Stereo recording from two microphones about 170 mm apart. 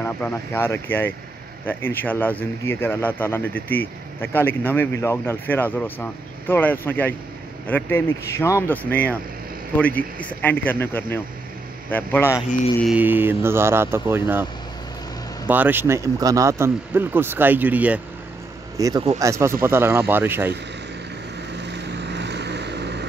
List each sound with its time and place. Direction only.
0.0 s speech: 15° left (ahead or behind)
12.8 s speech: 10° right (ahead or behind)
18.8 s speech: 20° right (ahead or behind)
21.5 s vehicle: 90° right